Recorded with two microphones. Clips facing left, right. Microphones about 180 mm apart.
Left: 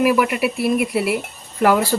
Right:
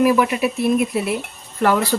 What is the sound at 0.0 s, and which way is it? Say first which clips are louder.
Speech: right 1 dB; 10° left (ahead or behind).